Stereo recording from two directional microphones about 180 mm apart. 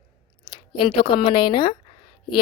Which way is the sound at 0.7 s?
30° left (ahead or behind).